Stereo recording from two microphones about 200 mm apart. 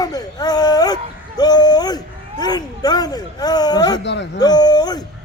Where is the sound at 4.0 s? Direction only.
60° left (ahead or behind).